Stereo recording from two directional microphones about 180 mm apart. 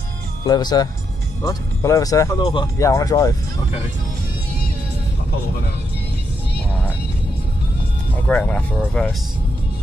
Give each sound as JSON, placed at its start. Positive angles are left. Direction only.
{"t": 0.5, "sound": "speech", "side_deg": 25}
{"t": 8.3, "sound": "speech", "side_deg": 10}